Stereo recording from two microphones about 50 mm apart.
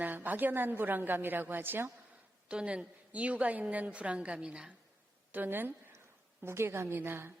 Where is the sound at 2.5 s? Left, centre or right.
Right.